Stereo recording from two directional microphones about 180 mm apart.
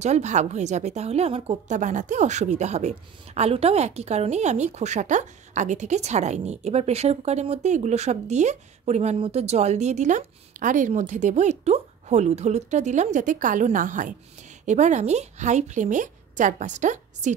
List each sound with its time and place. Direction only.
0.0 s a woman's voice: 40° right (ahead or behind)